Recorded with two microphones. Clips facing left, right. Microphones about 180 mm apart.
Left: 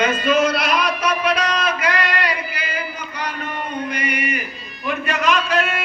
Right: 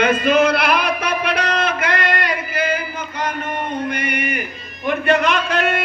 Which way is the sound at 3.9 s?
55° right (ahead or behind).